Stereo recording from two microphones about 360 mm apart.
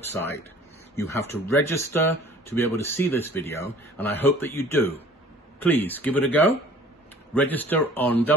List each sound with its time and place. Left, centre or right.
0.0 s speech: centre